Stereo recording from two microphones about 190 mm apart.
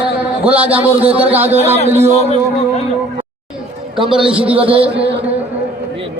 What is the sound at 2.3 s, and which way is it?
Speech, 35° left (ahead or behind).